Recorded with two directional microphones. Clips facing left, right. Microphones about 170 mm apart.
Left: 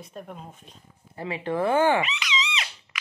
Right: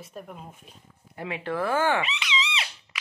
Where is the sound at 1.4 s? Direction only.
20° left (ahead or behind).